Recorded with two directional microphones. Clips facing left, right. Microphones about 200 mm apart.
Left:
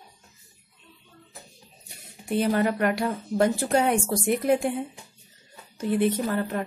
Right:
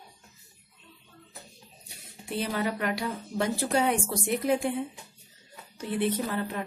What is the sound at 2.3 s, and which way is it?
A woman's voice, 50° left (ahead or behind).